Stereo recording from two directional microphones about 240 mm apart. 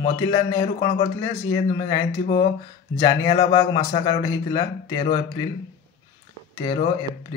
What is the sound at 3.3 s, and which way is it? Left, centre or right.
A man's voice, left.